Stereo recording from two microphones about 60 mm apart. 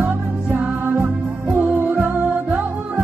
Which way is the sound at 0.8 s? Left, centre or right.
Right.